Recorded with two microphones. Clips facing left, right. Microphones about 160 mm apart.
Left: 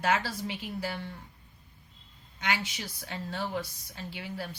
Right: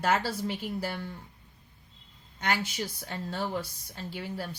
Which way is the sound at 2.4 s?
45° right (ahead or behind).